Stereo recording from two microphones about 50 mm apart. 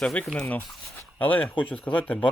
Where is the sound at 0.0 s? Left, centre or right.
Left.